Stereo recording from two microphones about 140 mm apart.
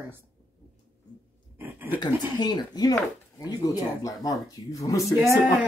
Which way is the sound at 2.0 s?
30° left (ahead or behind).